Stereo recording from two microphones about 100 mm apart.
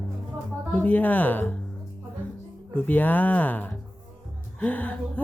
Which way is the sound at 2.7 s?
15° left (ahead or behind).